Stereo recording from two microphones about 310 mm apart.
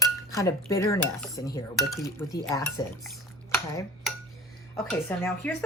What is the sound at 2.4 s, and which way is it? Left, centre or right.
Speech, centre.